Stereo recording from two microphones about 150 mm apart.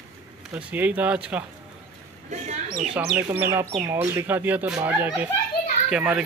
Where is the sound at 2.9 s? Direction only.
10° right (ahead or behind).